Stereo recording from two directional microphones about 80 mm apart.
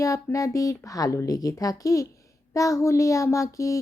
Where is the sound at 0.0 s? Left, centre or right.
Left.